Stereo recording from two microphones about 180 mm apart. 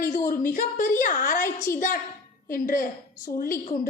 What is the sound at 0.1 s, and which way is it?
A woman's voice, 45° left (ahead or behind).